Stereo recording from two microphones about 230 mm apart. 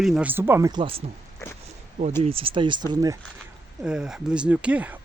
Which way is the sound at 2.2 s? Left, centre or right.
Right.